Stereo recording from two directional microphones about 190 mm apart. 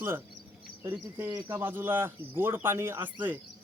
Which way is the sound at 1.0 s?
15° right (ahead or behind).